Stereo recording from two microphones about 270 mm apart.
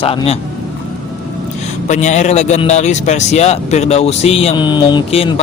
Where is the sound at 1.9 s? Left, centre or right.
Left.